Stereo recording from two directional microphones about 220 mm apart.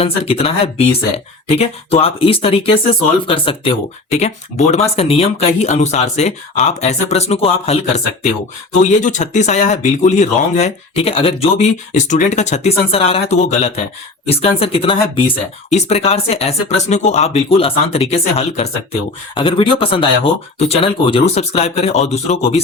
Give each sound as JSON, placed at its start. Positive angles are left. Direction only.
{"t": 0.0, "sound": "speech", "side_deg": 25}